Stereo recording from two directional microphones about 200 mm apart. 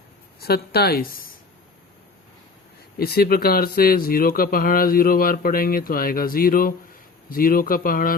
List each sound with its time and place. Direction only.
0.3 s speech: 50° left (ahead or behind)
3.0 s speech: 50° left (ahead or behind)